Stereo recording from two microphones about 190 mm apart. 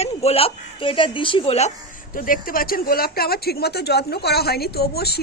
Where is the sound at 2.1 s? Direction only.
50° left (ahead or behind).